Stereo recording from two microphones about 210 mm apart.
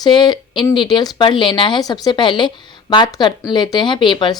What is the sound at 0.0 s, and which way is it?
Speech, 20° left (ahead or behind).